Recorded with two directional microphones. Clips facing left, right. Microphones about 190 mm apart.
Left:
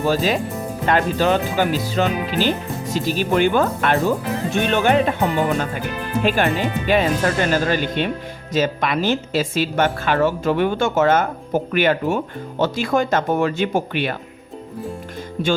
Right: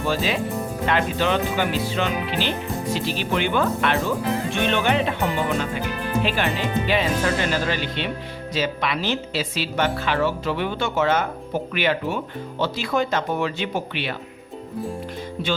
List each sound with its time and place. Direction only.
0.0 s speech: 40° left (ahead or behind)
6.2 s speech: 45° left (ahead or behind)
15.4 s speech: 50° left (ahead or behind)